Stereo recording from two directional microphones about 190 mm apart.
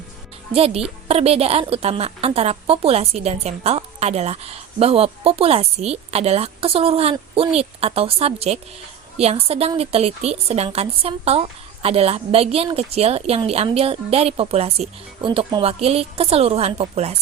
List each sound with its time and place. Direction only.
0.5 s speech: 30° right (ahead or behind)